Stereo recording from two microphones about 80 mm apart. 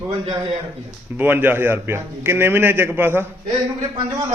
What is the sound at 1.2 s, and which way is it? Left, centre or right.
A man's voice, right.